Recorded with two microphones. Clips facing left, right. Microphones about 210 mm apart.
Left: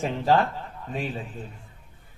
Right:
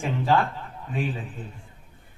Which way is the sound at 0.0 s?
40° left (ahead or behind).